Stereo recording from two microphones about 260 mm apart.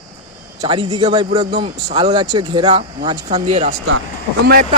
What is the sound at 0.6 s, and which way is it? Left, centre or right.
A man's voice, centre.